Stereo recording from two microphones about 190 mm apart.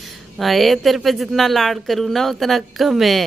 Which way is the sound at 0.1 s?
Centre (ahead or behind).